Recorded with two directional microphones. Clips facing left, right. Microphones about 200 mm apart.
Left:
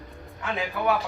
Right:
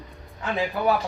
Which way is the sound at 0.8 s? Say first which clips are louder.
Right 2 dB; 35° right (ahead or behind).